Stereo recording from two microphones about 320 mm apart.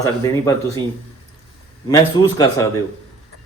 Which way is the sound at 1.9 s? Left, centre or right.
Centre.